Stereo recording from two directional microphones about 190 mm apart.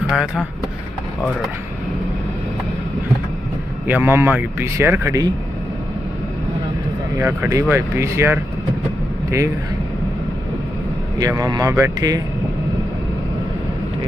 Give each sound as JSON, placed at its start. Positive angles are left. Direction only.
{"t": 0.1, "sound": "speech", "side_deg": -5}
{"t": 3.8, "sound": "speech", "side_deg": -10}
{"t": 7.2, "sound": "speech", "side_deg": -15}
{"t": 11.1, "sound": "speech", "side_deg": -20}